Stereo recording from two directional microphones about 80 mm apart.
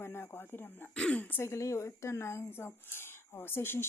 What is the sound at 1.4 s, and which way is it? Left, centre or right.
Speech, left.